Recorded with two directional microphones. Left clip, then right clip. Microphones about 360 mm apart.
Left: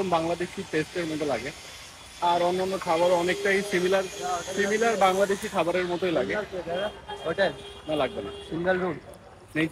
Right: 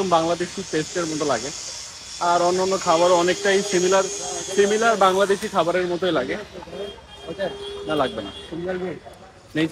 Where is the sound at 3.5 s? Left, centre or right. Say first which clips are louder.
Right 5 dB; centre.